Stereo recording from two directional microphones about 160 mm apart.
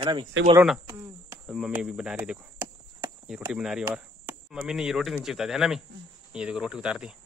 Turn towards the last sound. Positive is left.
turn(degrees=-5)  # may be behind; listen again after turning